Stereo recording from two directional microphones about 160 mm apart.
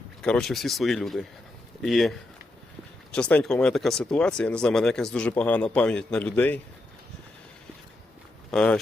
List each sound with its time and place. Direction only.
0.2 s speech: 5° left (ahead or behind)
8.4 s speech: 5° left (ahead or behind)